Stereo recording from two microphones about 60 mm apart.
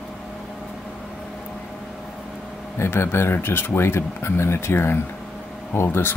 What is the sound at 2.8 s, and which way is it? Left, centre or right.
Speech, left.